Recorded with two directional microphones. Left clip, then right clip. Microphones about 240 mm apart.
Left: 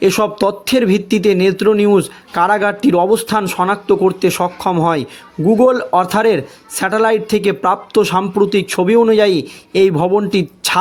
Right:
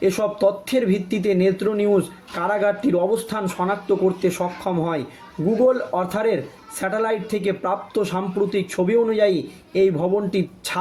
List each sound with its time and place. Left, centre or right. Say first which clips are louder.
0.0 s a man's voice: left 5 dB; left